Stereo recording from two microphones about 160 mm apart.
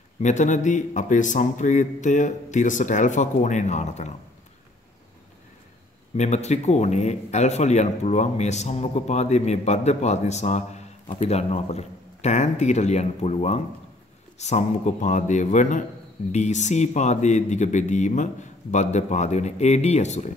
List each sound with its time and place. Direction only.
0.2 s a man's voice: 50° left (ahead or behind)
6.1 s a man's voice: 45° left (ahead or behind)